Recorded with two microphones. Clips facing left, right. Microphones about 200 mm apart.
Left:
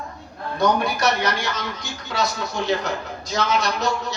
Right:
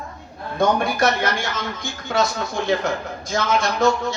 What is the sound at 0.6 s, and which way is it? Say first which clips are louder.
A man's voice: right 2 dB; 50° right (ahead or behind).